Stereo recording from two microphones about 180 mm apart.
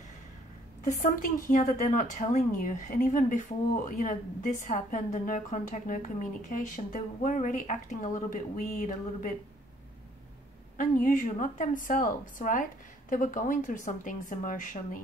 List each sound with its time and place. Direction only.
0.8 s speech: 50° left (ahead or behind)
10.8 s speech: 50° left (ahead or behind)